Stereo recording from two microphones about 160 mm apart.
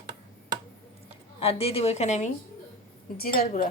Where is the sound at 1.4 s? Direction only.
35° left (ahead or behind).